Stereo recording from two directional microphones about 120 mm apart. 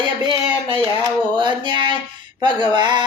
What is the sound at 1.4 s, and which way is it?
Speech, 40° right (ahead or behind).